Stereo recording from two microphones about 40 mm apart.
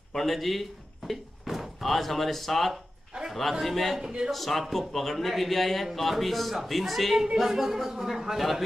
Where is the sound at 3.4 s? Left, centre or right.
Centre.